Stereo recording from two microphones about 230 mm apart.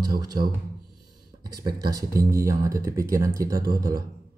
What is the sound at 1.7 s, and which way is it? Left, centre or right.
Speech, centre.